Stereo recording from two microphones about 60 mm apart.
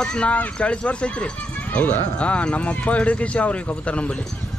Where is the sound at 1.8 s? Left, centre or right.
Left.